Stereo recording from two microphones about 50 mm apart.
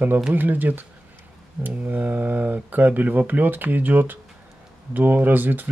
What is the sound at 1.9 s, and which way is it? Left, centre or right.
Speech, right.